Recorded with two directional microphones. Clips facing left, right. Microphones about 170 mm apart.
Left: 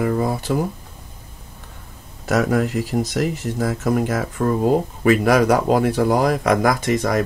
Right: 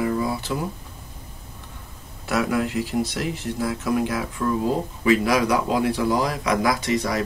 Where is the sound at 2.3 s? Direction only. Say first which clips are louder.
Left 4 dB; 45° left (ahead or behind).